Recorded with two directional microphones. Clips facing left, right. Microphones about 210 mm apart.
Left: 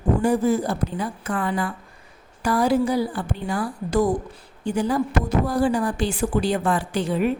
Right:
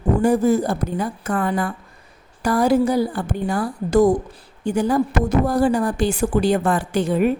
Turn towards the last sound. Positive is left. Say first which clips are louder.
# right 4 dB
turn(degrees=-45)  # may be behind; listen again after turning